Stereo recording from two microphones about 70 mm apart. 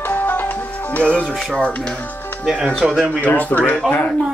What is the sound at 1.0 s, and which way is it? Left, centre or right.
Speech, centre.